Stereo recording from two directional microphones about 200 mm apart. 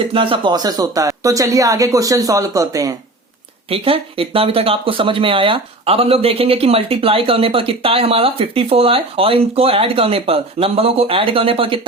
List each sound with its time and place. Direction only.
0.1 s speech: 25° right (ahead or behind)
3.7 s speech: 30° right (ahead or behind)